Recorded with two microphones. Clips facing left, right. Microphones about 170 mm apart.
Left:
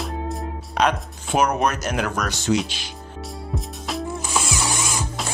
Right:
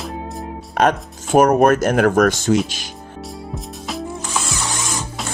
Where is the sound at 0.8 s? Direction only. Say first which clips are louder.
Right 4 dB; 50° right (ahead or behind).